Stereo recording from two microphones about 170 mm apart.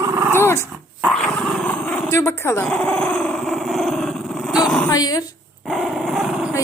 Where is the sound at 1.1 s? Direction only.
Centre (ahead or behind).